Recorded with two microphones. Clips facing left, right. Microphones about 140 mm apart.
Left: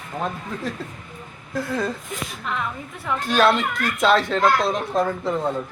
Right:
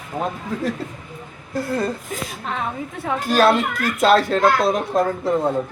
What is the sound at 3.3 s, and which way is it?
A child's voice, 5° right (ahead or behind).